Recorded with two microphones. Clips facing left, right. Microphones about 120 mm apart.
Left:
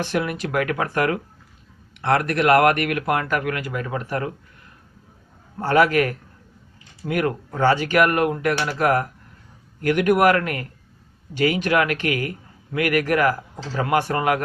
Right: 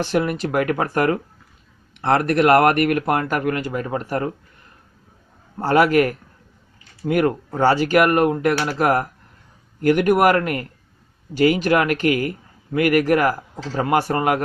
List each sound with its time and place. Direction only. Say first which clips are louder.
0.2 s speech: right 3 dB; 45° right (ahead or behind)
5.5 s speech: right 2 dB; 35° right (ahead or behind)